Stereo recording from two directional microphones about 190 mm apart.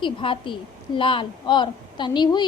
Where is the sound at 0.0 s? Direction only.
25° left (ahead or behind).